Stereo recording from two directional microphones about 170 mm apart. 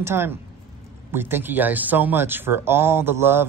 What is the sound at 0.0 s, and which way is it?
Speech, 15° right (ahead or behind).